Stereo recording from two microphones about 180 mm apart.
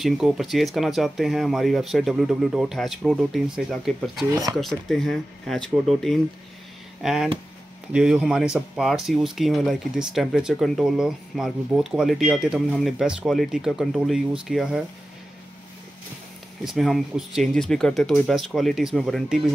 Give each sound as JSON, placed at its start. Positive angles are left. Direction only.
{"t": 0.0, "sound": "speech", "side_deg": 0}
{"t": 4.3, "sound": "speech", "side_deg": -20}
{"t": 4.6, "sound": "speech", "side_deg": 0}
{"t": 16.6, "sound": "speech", "side_deg": 0}